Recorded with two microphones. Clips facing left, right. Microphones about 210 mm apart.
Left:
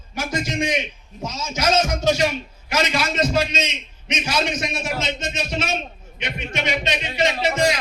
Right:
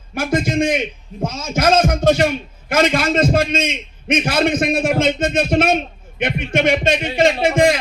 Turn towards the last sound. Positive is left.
turn(degrees=-50)  # may be behind; listen again after turning